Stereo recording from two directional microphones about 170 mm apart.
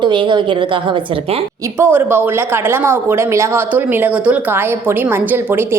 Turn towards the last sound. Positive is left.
turn(degrees=-10)  # may be behind; listen again after turning